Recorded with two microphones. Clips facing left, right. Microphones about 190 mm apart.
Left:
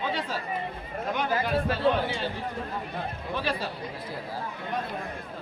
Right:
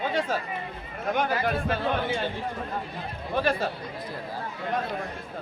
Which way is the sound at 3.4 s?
50° right (ahead or behind).